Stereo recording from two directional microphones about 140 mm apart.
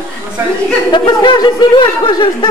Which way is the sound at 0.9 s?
35° left (ahead or behind).